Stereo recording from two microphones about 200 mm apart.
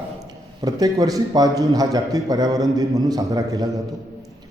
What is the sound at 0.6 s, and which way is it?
A man's voice, 20° right (ahead or behind).